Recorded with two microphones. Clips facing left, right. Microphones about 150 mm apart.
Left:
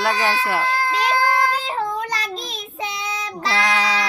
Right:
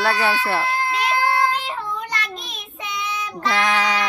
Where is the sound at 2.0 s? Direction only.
35° left (ahead or behind).